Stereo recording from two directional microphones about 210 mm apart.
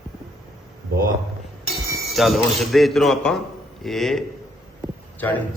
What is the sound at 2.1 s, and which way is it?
A man's voice, centre (ahead or behind).